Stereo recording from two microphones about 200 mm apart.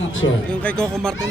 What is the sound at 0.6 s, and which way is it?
Speech, 5° left (ahead or behind).